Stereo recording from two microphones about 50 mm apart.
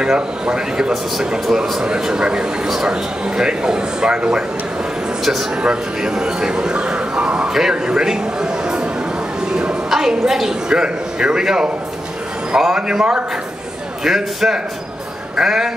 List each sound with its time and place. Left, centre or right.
0.0 s speech: centre
5.2 s speech: centre
5.6 s a man's voice: centre
9.8 s a woman's voice: centre